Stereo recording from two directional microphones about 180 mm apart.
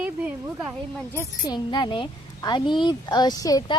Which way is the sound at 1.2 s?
20° left (ahead or behind).